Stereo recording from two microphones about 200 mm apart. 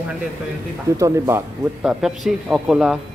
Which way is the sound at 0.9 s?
15° right (ahead or behind).